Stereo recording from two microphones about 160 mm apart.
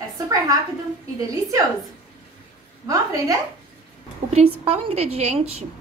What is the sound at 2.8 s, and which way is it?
Speech, 20° right (ahead or behind).